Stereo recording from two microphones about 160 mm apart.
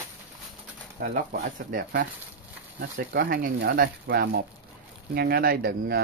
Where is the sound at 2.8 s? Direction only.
70° right (ahead or behind).